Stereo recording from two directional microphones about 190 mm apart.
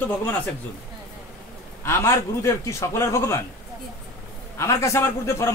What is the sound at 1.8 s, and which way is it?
A man's voice, 15° left (ahead or behind).